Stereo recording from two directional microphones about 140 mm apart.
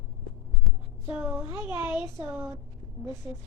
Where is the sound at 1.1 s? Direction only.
15° right (ahead or behind).